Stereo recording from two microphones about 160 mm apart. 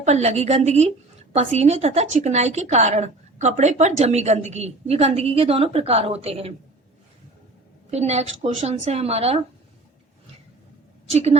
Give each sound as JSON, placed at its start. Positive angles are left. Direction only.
{"t": 0.0, "sound": "a woman's voice", "side_deg": -45}
{"t": 7.9, "sound": "speech", "side_deg": -45}
{"t": 11.1, "sound": "a woman's voice", "side_deg": -40}